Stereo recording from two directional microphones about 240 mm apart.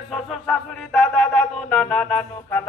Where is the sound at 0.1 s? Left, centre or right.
Centre.